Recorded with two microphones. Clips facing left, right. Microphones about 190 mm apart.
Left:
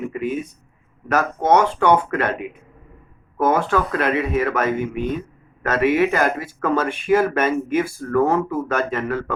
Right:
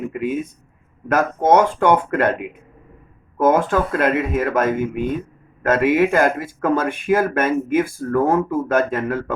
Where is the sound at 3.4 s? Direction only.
50° right (ahead or behind).